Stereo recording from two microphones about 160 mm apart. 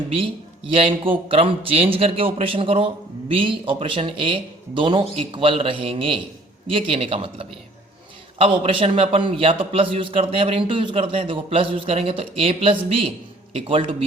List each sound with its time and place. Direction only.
0.7 s a man's voice: 35° right (ahead or behind)